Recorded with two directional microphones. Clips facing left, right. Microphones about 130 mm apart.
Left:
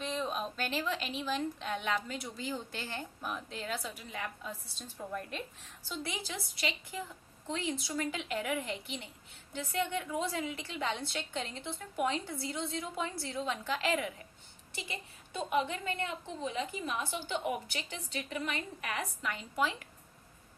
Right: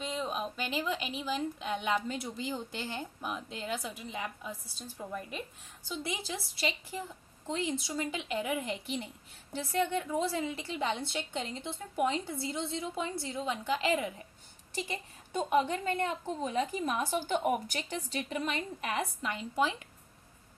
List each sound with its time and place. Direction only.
0.0 s a sound: 10° right (ahead or behind)
0.9 s a woman's voice: 5° right (ahead or behind)
2.0 s a woman's voice: 25° right (ahead or behind)
4.9 s a woman's voice: 5° right (ahead or behind)
6.0 s a woman's voice: 25° right (ahead or behind)
9.5 s a woman's voice: 35° right (ahead or behind)
14.8 s a woman's voice: 35° right (ahead or behind)